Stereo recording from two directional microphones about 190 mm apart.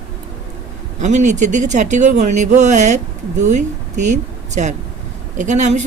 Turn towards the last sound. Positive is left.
turn(degrees=-40)  # may be behind; listen again after turning